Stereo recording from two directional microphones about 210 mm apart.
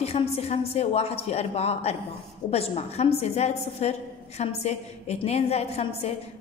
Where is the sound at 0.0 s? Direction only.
30° left (ahead or behind).